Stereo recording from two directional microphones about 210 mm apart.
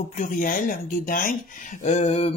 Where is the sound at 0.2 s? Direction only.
40° left (ahead or behind).